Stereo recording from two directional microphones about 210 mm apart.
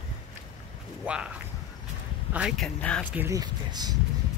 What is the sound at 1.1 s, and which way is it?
Speech, 5° right (ahead or behind).